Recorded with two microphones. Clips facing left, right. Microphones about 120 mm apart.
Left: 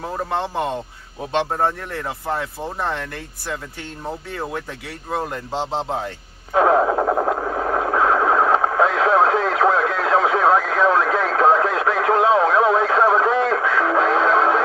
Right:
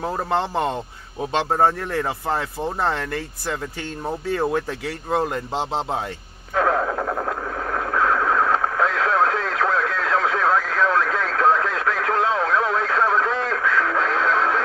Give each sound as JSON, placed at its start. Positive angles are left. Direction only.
{"t": 6.5, "sound": "radio", "side_deg": 25}